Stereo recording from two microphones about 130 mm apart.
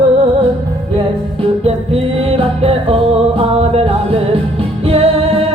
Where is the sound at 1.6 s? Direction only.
50° right (ahead or behind).